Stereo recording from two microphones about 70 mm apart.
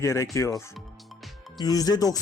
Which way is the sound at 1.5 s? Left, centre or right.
Left.